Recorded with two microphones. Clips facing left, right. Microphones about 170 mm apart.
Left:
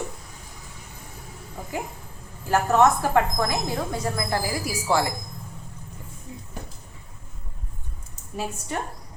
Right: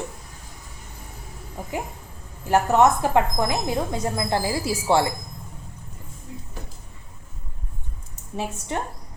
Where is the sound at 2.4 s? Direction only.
20° right (ahead or behind).